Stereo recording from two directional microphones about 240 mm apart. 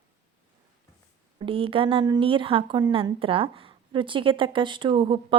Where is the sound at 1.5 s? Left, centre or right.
Right.